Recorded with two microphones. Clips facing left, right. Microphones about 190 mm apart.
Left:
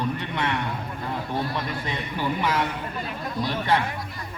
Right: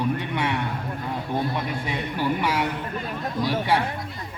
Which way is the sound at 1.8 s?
10° right (ahead or behind).